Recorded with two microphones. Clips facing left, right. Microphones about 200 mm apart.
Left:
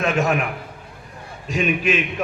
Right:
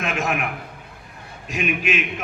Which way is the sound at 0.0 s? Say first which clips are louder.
Left 5 dB; 40° left (ahead or behind).